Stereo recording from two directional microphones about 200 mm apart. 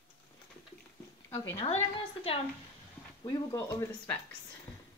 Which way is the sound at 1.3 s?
15° left (ahead or behind).